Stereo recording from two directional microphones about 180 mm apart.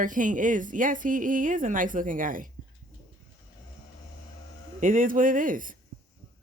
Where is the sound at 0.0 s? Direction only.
45° right (ahead or behind).